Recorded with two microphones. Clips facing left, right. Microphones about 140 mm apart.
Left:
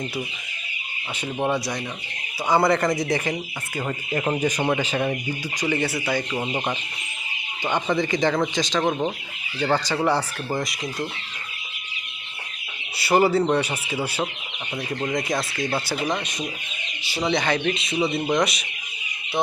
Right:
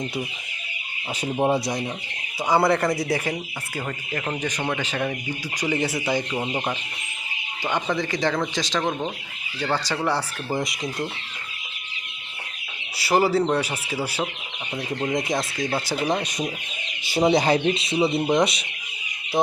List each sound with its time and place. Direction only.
1.3 s speech: 30° right (ahead or behind)
2.5 s a man's voice: 5° right (ahead or behind)
3.8 s speech: 15° left (ahead or behind)
5.5 s a man's voice: 10° right (ahead or behind)
6.3 s speech: 5° right (ahead or behind)
13.0 s speech: 5° right (ahead or behind)
15.1 s speech: 20° right (ahead or behind)
16.0 s speech: 35° right (ahead or behind)
17.1 s speech: 45° right (ahead or behind); by 18.6 s 25° right (ahead or behind)